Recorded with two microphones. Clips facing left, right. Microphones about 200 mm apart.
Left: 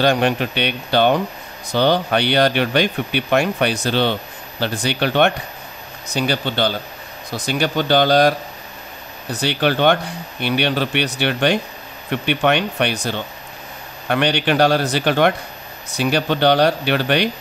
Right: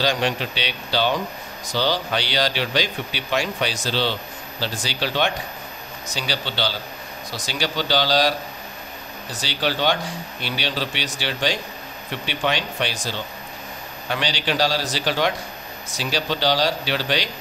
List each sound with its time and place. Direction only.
0.0 s speech: 55° left (ahead or behind)